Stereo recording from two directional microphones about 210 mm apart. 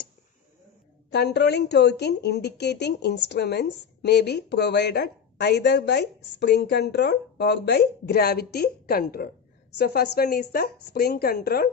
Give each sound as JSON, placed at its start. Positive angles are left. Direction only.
{"t": 1.1, "sound": "speech", "side_deg": 55}